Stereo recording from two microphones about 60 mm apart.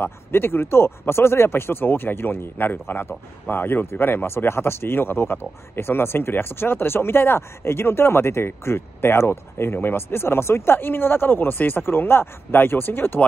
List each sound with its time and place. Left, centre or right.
0.0 s speech: left